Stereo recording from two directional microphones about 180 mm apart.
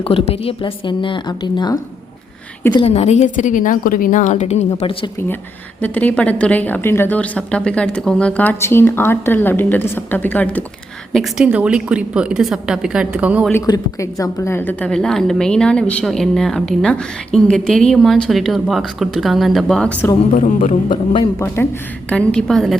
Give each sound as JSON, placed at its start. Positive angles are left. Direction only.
{"t": 0.0, "sound": "a woman's voice", "side_deg": 30}
{"t": 2.7, "sound": "a woman's voice", "side_deg": 35}
{"t": 5.8, "sound": "a woman's voice", "side_deg": 10}
{"t": 11.1, "sound": "a woman's voice", "side_deg": 0}
{"t": 13.5, "sound": "a woman's voice", "side_deg": 20}
{"t": 20.3, "sound": "speech", "side_deg": 45}
{"t": 21.3, "sound": "a woman's voice", "side_deg": 15}